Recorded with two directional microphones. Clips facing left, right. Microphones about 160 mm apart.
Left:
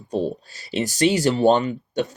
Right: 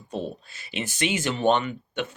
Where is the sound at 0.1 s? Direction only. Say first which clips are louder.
Left 7 dB; 40° left (ahead or behind).